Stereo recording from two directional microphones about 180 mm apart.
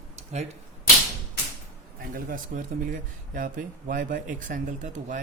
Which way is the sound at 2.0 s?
50° right (ahead or behind).